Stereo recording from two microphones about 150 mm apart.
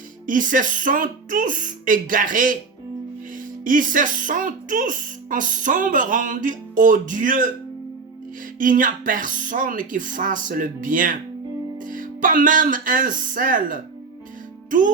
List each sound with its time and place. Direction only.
0.3 s speech: 60° right (ahead or behind)
8.5 s speech: 65° right (ahead or behind)